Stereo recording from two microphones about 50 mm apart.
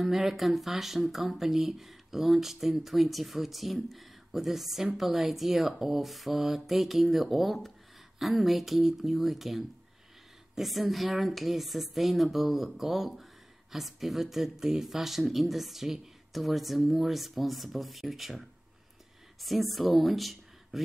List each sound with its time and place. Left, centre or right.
0.0 s a woman's voice: centre
19.4 s speech: centre